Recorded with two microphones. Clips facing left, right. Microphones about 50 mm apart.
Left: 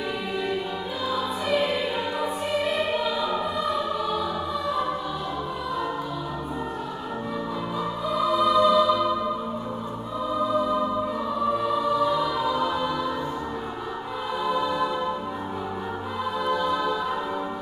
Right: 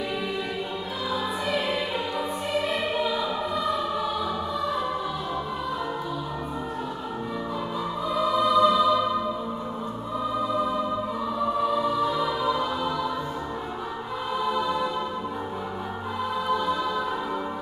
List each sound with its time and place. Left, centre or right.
1.1 s music: centre
8.4 s music: centre
11.6 s music: centre
12.2 s music: centre
14.5 s music: centre